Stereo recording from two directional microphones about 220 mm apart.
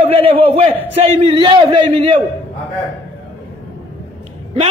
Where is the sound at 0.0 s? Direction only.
25° right (ahead or behind).